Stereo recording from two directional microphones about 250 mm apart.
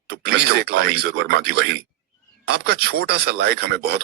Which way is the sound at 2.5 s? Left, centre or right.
Right.